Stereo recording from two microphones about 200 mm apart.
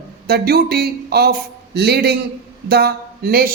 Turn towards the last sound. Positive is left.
turn(degrees=-50)  # may be behind; listen again after turning